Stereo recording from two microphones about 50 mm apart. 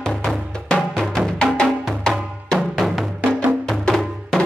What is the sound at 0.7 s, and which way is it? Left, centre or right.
Music, centre.